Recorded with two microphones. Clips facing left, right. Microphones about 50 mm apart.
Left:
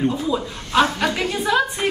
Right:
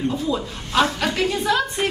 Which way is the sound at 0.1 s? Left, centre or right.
Centre.